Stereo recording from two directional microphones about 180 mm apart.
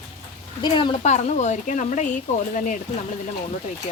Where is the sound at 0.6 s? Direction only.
25° left (ahead or behind).